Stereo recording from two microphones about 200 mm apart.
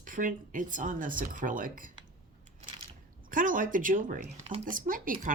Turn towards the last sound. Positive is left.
turn(degrees=-45)  # may be behind; listen again after turning